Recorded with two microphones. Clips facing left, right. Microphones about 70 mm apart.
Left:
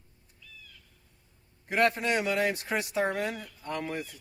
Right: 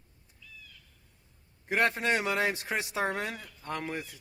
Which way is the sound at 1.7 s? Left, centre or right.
Right.